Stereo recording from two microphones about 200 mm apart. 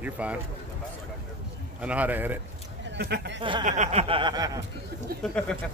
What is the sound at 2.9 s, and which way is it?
Speech, 55° right (ahead or behind).